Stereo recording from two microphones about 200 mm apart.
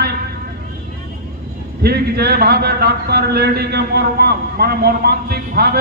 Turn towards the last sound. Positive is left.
turn(degrees=-50)  # may be behind; listen again after turning